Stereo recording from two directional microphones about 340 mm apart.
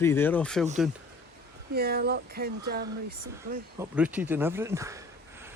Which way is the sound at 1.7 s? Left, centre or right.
Right.